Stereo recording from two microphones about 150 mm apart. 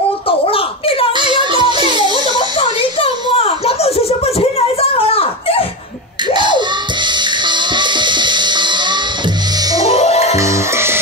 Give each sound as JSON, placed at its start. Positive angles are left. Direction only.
{"t": 0.3, "sound": "a sound", "side_deg": 40}
{"t": 1.1, "sound": "music", "side_deg": -30}
{"t": 2.3, "sound": "a sound", "side_deg": 35}
{"t": 6.2, "sound": "music", "side_deg": -30}
{"t": 9.8, "sound": "music", "side_deg": 45}
{"t": 10.3, "sound": "music", "side_deg": -20}